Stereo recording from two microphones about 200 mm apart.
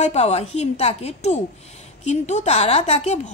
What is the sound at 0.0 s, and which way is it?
Speech, 30° left (ahead or behind).